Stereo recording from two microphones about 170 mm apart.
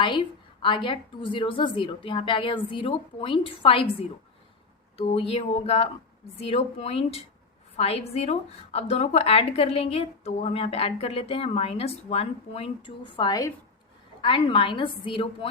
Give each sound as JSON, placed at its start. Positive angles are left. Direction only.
{"t": 0.0, "sound": "a woman's voice", "side_deg": 30}
{"t": 4.9, "sound": "a woman's voice", "side_deg": 35}